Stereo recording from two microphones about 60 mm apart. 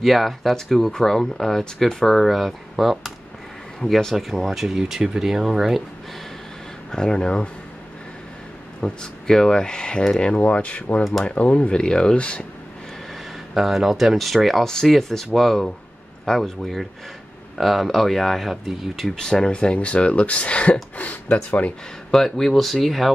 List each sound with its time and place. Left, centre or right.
0.0 s speech: centre
6.9 s speech: centre
8.8 s speech: centre
13.6 s speech: centre
22.1 s speech: centre